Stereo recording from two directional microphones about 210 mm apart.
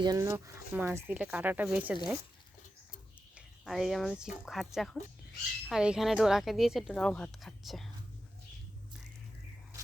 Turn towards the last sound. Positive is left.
turn(degrees=0)  # may be behind; listen again after turning